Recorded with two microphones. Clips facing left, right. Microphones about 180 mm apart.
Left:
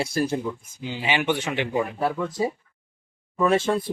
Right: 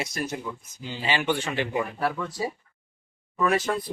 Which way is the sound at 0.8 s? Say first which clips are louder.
Left 2 dB; 15° left (ahead or behind).